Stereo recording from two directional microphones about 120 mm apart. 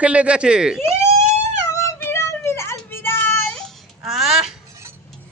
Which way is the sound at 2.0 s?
20° left (ahead or behind).